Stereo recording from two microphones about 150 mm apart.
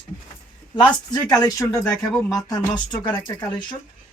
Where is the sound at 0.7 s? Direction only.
30° left (ahead or behind).